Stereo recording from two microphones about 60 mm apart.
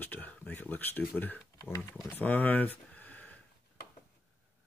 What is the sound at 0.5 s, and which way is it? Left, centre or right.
Speech, left.